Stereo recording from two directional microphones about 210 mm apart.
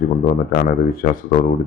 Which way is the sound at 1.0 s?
40° left (ahead or behind).